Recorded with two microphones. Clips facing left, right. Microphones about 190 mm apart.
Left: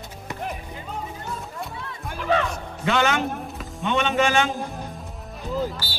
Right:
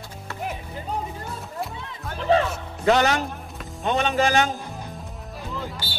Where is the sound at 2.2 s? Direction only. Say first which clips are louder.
Right 3 dB; 30° right (ahead or behind).